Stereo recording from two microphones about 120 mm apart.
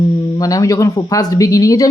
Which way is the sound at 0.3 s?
30° left (ahead or behind).